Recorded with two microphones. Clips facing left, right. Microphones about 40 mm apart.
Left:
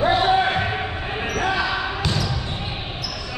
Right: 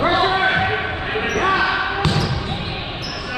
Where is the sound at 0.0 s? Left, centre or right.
Right.